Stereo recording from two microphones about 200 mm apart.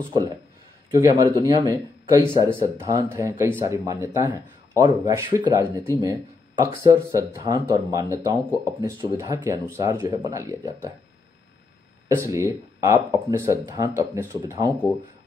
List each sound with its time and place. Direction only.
0.9 s speech: 15° right (ahead or behind)
12.2 s speech: 15° right (ahead or behind)